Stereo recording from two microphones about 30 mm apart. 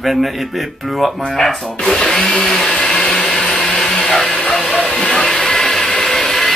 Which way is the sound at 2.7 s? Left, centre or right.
Left.